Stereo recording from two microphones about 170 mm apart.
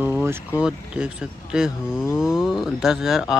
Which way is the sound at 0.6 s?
5° right (ahead or behind).